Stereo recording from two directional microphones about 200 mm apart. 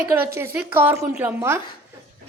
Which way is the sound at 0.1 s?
10° right (ahead or behind).